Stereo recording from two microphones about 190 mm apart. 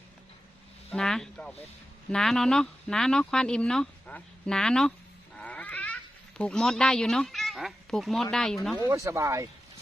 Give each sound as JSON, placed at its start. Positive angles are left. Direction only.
{"t": 0.9, "sound": "speech", "side_deg": 0}
{"t": 8.9, "sound": "speech", "side_deg": -15}